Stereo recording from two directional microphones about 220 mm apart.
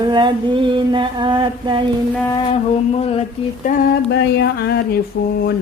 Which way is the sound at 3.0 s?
25° left (ahead or behind).